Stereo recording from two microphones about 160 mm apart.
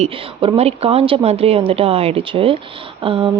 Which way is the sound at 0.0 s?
40° right (ahead or behind).